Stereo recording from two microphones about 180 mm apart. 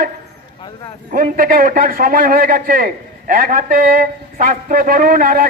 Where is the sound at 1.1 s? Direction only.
50° right (ahead or behind).